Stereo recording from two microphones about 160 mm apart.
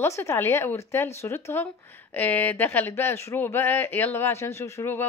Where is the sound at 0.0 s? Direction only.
15° left (ahead or behind).